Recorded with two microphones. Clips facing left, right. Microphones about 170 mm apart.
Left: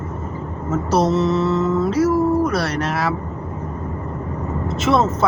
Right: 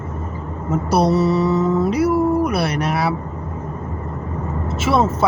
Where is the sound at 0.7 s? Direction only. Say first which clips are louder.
Right 1 dB; 10° right (ahead or behind).